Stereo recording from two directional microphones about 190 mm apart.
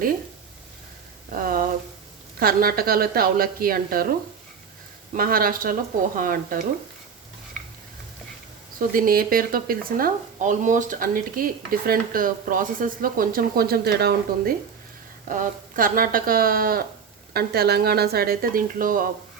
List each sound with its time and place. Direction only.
1.3 s a sound: 45° right (ahead or behind)
2.4 s speech: 50° right (ahead or behind)
5.1 s speech: 50° right (ahead or behind)
8.9 s speech: 50° right (ahead or behind)